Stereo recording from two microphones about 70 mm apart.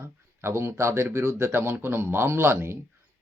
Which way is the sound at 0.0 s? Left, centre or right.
Right.